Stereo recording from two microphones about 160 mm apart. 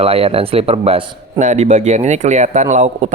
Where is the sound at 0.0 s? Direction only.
35° right (ahead or behind).